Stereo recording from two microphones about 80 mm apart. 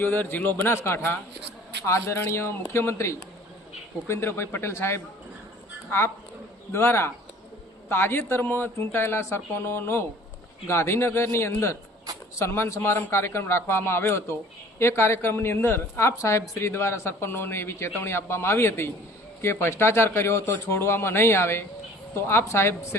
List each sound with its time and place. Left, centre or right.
0.0 s a woman's voice: left
6.7 s a woman's voice: left